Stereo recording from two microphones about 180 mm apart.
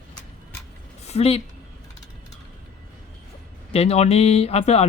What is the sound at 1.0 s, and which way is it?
Speech, 35° left (ahead or behind).